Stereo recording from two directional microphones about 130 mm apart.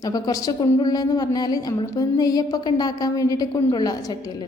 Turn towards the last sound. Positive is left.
turn(degrees=30)  # may be behind; listen again after turning